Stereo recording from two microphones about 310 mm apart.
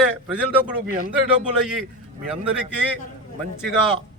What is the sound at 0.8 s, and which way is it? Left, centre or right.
Speech, right.